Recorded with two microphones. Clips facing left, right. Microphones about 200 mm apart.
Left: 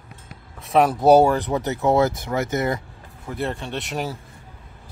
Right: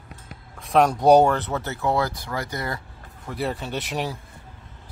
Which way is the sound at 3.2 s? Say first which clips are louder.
Left 1 dB; centre (ahead or behind).